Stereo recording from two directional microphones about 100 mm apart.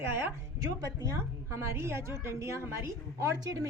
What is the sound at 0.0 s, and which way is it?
A woman's voice, 25° right (ahead or behind).